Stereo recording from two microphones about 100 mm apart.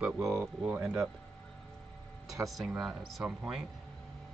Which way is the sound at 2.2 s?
35° right (ahead or behind).